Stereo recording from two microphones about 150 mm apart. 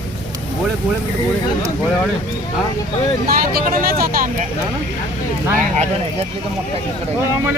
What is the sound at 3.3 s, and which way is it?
Speech, 80° right.